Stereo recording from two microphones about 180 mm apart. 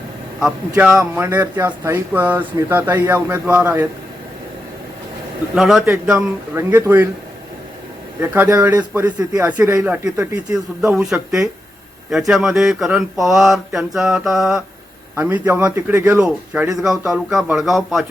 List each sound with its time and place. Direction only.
0.8 s speech: 5° right (ahead or behind)
5.5 s speech: 5° right (ahead or behind)
8.2 s speech: 10° right (ahead or behind)
12.1 s mantra: centre (ahead or behind)
15.1 s speech: 15° right (ahead or behind)
17.6 s mantra: centre (ahead or behind)